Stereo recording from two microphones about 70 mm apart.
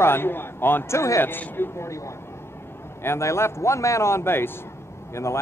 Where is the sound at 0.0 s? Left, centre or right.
Left.